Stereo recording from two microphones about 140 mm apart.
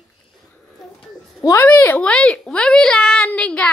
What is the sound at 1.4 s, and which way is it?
Speech, 20° left (ahead or behind).